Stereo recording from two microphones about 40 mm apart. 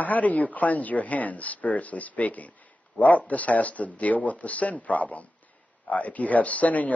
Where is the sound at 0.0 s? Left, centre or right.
Left.